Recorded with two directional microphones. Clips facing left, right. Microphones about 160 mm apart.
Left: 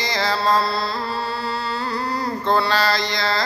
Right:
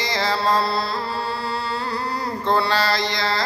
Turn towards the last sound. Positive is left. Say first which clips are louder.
# left 1 dB
turn(degrees=-25)  # may be behind; listen again after turning